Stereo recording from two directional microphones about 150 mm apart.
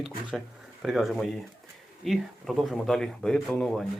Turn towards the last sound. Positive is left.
turn(degrees=0)  # may be behind; listen again after turning